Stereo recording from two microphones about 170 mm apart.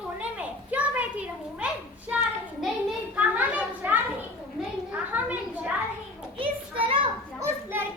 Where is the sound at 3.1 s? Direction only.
10° right (ahead or behind).